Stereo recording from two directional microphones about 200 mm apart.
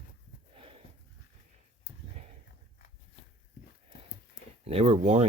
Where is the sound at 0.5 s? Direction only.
30° right (ahead or behind).